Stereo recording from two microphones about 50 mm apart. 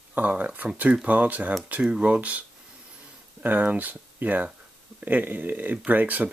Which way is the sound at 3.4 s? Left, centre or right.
Right.